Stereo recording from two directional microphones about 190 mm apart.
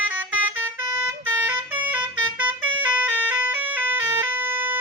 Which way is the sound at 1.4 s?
10° right (ahead or behind).